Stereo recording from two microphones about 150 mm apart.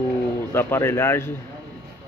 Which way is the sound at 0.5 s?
15° left (ahead or behind).